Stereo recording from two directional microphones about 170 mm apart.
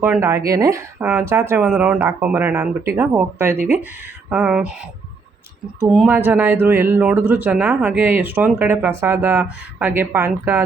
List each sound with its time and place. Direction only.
0.0 s speech: 15° right (ahead or behind)
1.7 s speech: 5° right (ahead or behind)
4.3 s speech: 5° right (ahead or behind)
5.8 s speech: centre (ahead or behind)